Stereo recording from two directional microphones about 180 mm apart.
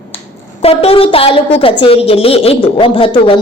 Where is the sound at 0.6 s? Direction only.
30° left (ahead or behind).